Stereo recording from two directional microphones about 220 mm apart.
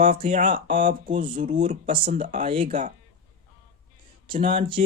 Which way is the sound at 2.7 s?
35° right (ahead or behind).